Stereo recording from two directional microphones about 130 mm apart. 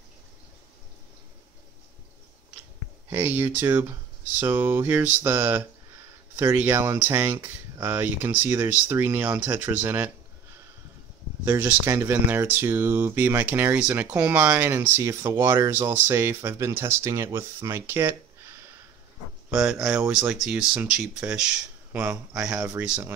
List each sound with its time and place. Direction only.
3.1 s speech: 15° right (ahead or behind)
11.4 s speech: 20° right (ahead or behind)
19.5 s speech: 10° right (ahead or behind)